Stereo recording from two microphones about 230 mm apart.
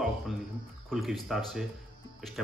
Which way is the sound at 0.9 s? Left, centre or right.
Centre.